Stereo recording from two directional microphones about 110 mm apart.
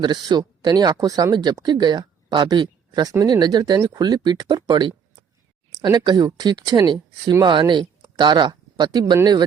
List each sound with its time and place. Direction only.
0.0 s speech: 40° right (ahead or behind)